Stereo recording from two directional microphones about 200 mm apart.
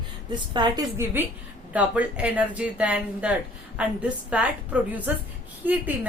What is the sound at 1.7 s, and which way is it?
Speech, 5° right (ahead or behind).